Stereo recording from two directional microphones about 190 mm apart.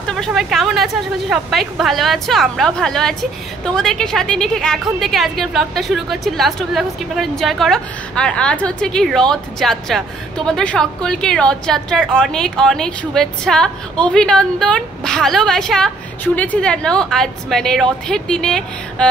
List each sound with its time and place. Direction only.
0.0 s a woman's voice: centre (ahead or behind)